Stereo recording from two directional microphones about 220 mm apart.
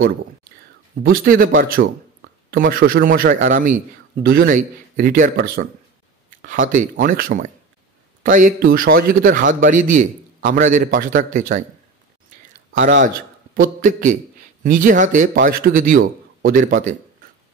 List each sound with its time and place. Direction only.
1.0 s a man's voice: 40° right (ahead or behind)
13.6 s a man's voice: 40° right (ahead or behind)